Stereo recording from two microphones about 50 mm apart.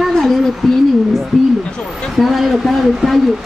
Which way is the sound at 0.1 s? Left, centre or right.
Centre.